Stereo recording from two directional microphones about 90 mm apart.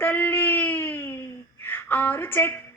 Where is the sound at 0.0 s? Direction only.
20° left (ahead or behind).